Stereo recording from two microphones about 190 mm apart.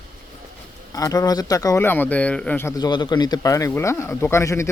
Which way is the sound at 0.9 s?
15° left (ahead or behind).